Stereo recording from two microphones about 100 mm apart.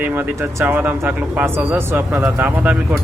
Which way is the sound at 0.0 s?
20° right (ahead or behind).